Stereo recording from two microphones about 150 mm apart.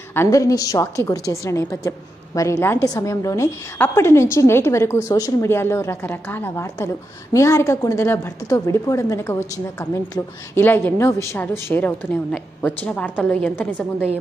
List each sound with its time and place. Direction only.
0.1 s a woman's voice: 20° left (ahead or behind)